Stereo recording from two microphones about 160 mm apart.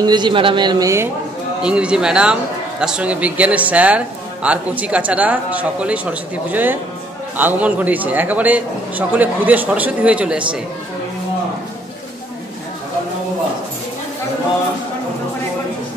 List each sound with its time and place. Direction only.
0.0 s a man's voice: 30° right (ahead or behind)
1.6 s speech: 5° right (ahead or behind)